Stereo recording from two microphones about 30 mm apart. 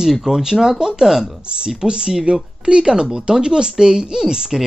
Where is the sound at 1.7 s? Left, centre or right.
Right.